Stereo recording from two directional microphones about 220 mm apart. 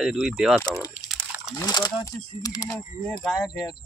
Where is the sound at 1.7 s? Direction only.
15° left (ahead or behind).